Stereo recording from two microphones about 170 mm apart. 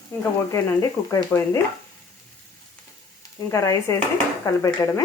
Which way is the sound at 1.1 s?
20° left (ahead or behind).